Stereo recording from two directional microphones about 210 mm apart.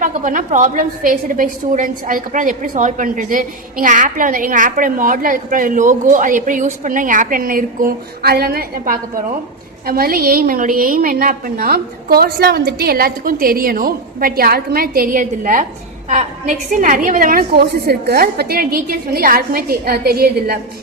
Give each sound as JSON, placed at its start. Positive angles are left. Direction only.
{"t": 0.0, "sound": "a woman's voice", "side_deg": -40}